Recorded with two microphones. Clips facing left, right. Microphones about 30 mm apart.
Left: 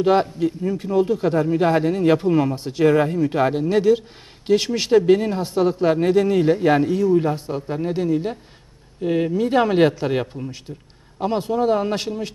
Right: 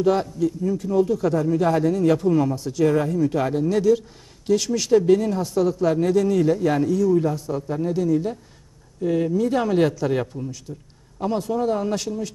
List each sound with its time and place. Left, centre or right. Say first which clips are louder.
0.0 s speech: left 2 dB; left